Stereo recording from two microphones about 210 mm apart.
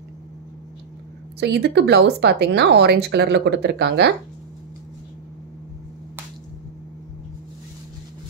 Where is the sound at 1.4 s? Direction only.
55° right (ahead or behind).